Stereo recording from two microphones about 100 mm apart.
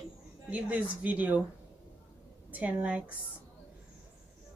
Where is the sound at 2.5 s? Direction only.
15° right (ahead or behind).